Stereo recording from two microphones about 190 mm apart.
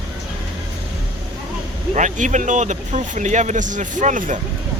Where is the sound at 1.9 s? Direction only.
40° right (ahead or behind).